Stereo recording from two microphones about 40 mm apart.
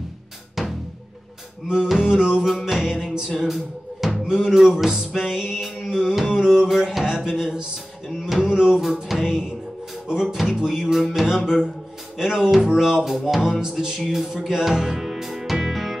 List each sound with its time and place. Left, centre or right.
0.6 s drum: centre
1.7 s music: centre
6.7 s music: centre
7.2 s speech: centre
8.9 s music: centre
9.2 s music: centre
13.9 s music: centre